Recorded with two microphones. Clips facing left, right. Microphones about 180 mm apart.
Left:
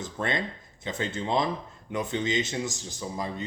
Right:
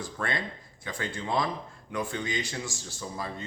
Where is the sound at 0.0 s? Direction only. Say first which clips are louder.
Left 3 dB; 20° left (ahead or behind).